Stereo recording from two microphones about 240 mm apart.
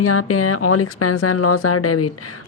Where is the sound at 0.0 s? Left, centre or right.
Left.